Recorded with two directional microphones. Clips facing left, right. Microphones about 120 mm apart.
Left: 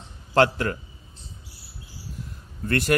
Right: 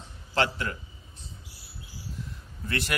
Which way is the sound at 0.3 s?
50° left (ahead or behind).